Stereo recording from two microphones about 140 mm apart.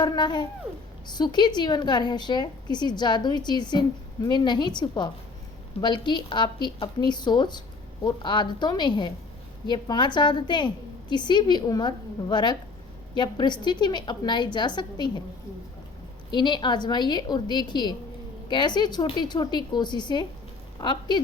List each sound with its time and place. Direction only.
0.0 s a woman's voice: 30° left (ahead or behind)
16.3 s a woman's voice: 30° left (ahead or behind)